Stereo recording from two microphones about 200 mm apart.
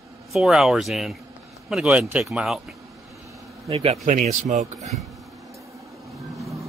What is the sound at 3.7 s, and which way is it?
Speech, 30° right (ahead or behind).